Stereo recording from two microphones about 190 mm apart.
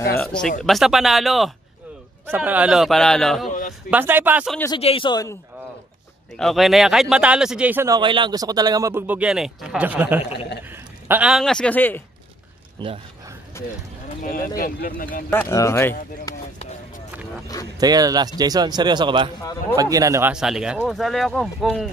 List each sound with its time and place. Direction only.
0.2 s speech: 5° left (ahead or behind)
3.4 s a sound: 40° left (ahead or behind)
3.9 s a man's voice: 10° right (ahead or behind)
4.7 s speech: 30° left (ahead or behind)
6.3 s a man's voice: centre (ahead or behind)
12.8 s speech: 25° right (ahead or behind)
13.5 s speech: 15° left (ahead or behind)
14.2 s speech: 45° left (ahead or behind)
15.2 s speech: 10° left (ahead or behind)
17.7 s speech: 20° right (ahead or behind); by 21.8 s centre (ahead or behind)